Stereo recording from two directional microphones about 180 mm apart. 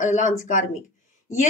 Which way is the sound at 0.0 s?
45° left (ahead or behind).